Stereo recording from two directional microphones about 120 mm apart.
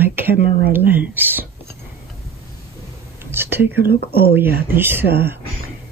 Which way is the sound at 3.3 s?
20° right (ahead or behind).